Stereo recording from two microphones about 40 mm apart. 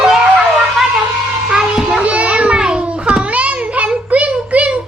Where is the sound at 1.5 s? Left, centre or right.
Centre.